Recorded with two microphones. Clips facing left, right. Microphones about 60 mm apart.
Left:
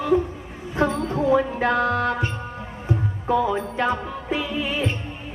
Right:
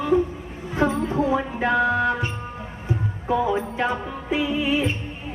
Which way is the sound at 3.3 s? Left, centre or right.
Centre.